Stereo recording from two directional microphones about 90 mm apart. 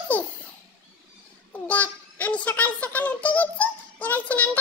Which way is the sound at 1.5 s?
15° left (ahead or behind).